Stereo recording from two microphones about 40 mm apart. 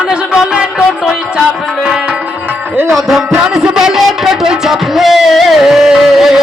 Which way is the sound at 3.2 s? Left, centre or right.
Centre.